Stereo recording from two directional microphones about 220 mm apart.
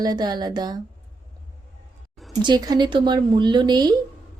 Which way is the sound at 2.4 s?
20° right (ahead or behind).